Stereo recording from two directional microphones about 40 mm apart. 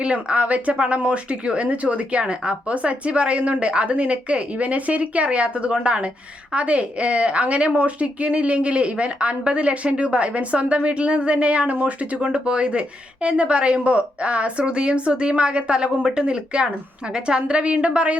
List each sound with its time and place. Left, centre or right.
0.0 s a woman's voice: right